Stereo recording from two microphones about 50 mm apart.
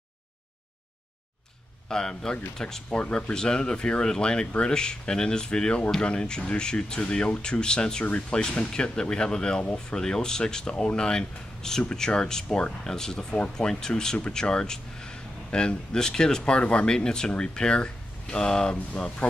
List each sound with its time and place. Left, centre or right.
1.9 s speech: centre